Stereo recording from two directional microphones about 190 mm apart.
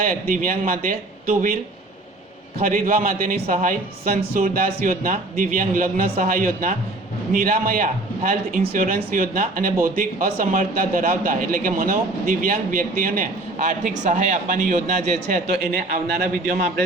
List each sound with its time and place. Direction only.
0.0 s a man's voice: 50° right (ahead or behind)
2.6 s a man's voice: 50° right (ahead or behind)